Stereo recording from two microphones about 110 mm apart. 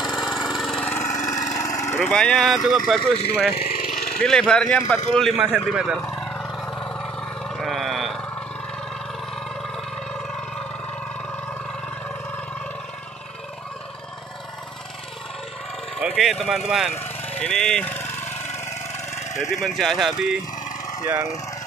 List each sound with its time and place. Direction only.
0.0 s lawn mower: centre (ahead or behind)
0.9 s lawn mower: 30° left (ahead or behind)
2.0 s speech: 10° left (ahead or behind)
5.4 s a man's voice: 10° right (ahead or behind)
6.0 s vehicle: 15° left (ahead or behind); by 8.2 s centre (ahead or behind)
16.0 s speech: 5° right (ahead or behind)
17.4 s a sound: 10° left (ahead or behind)
18.3 s engine: 90° left
19.5 s speech: centre (ahead or behind)
21.0 s speech: 20° right (ahead or behind)